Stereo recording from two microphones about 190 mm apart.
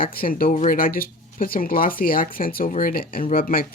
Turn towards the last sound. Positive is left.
turn(degrees=50)  # may be behind; listen again after turning